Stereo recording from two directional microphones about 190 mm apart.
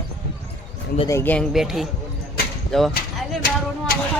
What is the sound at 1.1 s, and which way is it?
Speech, 10° left (ahead or behind).